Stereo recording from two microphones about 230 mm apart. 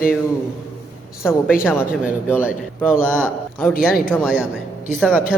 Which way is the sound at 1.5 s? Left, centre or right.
Centre.